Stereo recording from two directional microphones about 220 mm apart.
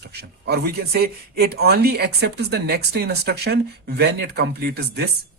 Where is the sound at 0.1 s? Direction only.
45° right (ahead or behind).